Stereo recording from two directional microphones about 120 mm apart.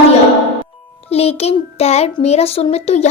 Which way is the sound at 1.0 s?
55° left (ahead or behind).